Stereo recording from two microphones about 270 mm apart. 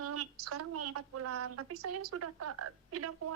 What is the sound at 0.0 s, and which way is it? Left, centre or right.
A woman's voice, right.